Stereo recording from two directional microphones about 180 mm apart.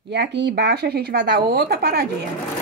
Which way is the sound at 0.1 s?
75° right (ahead or behind).